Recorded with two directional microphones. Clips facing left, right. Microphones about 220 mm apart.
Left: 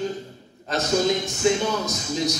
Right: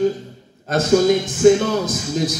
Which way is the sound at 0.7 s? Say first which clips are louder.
Right 7 dB; 50° right (ahead or behind).